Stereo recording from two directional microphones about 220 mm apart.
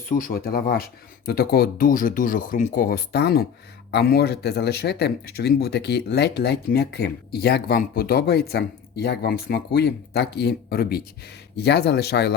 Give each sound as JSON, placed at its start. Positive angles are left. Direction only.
{"t": 0.1, "sound": "speech", "side_deg": 40}